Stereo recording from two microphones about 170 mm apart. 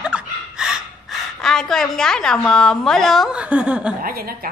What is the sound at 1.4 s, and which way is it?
A woman's voice, 5° left (ahead or behind).